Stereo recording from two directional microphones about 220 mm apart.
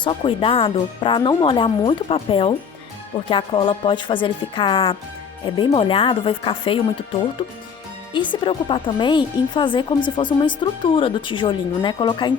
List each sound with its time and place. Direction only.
0.0 s speech: 25° left (ahead or behind)
8.1 s speech: 20° left (ahead or behind)